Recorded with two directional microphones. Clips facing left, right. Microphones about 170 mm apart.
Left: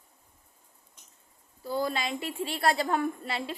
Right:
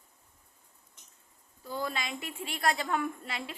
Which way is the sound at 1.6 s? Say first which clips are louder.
Left 5 dB; 35° left (ahead or behind).